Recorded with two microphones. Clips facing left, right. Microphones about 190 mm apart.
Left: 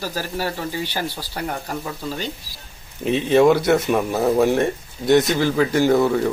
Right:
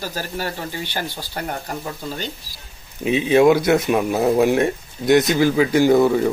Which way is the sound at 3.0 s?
5° right (ahead or behind).